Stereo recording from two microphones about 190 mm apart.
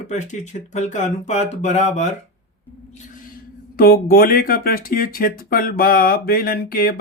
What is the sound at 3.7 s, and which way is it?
Speech, 50° left (ahead or behind).